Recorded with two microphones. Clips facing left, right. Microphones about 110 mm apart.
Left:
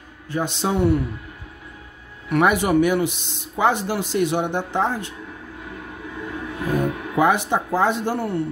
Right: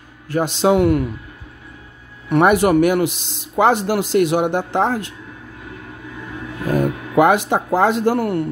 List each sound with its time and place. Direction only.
0.3 s speech: 90° right
2.4 s speech: 65° right (ahead or behind); by 5.0 s 85° right
7.2 s speech: 80° right